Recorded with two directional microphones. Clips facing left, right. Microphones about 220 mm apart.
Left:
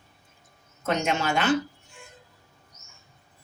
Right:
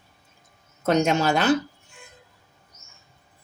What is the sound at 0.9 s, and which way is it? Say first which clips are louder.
Speech: right 6 dB; 40° right (ahead or behind).